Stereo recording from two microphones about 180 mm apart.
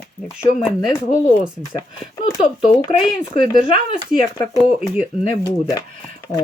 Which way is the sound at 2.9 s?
35° left (ahead or behind).